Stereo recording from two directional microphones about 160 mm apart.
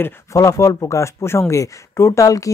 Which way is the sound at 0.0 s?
20° left (ahead or behind).